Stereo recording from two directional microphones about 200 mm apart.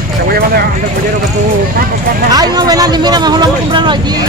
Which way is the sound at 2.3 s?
20° right (ahead or behind).